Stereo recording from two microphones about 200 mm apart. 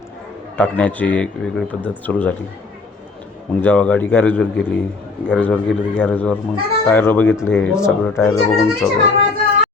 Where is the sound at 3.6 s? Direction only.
10° left (ahead or behind).